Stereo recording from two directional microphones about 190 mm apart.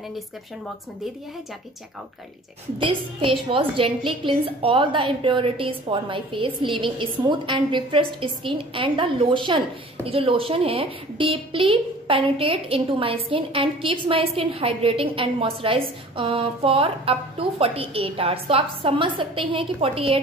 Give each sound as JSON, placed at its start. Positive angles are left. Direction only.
{"t": 2.8, "sound": "a woman's voice", "side_deg": -25}